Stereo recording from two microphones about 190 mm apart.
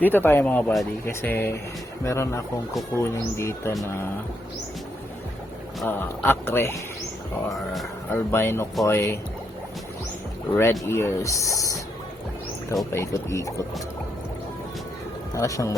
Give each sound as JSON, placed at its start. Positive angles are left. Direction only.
{"t": 0.0, "sound": "speech", "side_deg": 10}
{"t": 5.8, "sound": "speech", "side_deg": 10}
{"t": 7.5, "sound": "speech", "side_deg": 0}
{"t": 8.1, "sound": "speech", "side_deg": 10}
{"t": 10.5, "sound": "speech", "side_deg": 15}
{"t": 12.9, "sound": "speech", "side_deg": 15}
{"t": 15.4, "sound": "speech", "side_deg": 15}